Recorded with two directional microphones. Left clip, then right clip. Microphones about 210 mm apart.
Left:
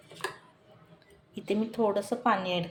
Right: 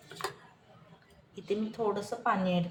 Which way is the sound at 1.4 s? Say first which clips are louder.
Left 4 dB; 50° left (ahead or behind).